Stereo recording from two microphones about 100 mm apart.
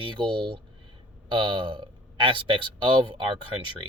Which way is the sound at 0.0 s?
55° right (ahead or behind).